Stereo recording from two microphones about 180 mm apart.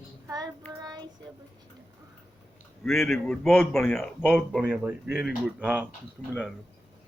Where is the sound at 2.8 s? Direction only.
Centre (ahead or behind).